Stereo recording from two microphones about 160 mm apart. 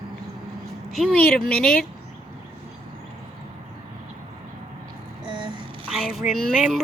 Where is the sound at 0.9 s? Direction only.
Centre (ahead or behind).